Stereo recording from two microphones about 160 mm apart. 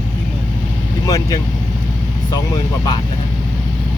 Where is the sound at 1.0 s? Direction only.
25° left (ahead or behind).